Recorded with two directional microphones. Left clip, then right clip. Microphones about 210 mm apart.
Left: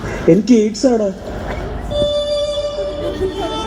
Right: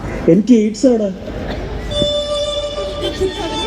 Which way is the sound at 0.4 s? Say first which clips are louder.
Right 1 dB; 50° right (ahead or behind).